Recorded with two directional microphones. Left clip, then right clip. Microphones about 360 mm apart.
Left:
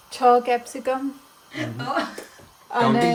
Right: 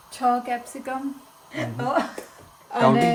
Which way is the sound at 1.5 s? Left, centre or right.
Centre.